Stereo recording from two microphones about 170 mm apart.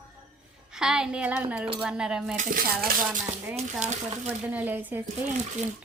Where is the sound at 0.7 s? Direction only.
5° right (ahead or behind).